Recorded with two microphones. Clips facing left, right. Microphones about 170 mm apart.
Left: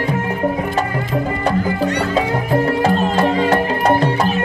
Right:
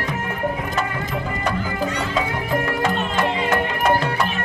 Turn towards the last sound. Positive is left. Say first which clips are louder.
# left 5 dB
turn(degrees=35)  # may be behind; listen again after turning